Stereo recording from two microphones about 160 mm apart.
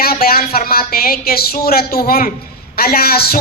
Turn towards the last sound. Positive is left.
turn(degrees=75)  # may be behind; listen again after turning